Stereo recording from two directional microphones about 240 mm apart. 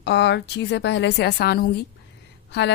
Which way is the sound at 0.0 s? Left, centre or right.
Left.